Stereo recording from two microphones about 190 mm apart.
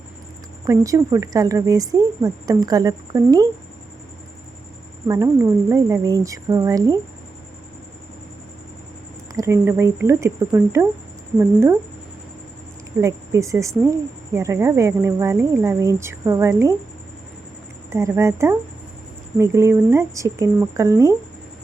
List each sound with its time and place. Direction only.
0.6 s a woman's voice: 15° right (ahead or behind)
5.0 s a woman's voice: 15° right (ahead or behind)
9.3 s a woman's voice: 15° right (ahead or behind)
13.0 s a woman's voice: 15° right (ahead or behind)
17.9 s a woman's voice: 15° right (ahead or behind)